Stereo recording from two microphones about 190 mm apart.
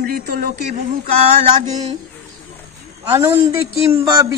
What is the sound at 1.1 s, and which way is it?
Speech, 40° right (ahead or behind).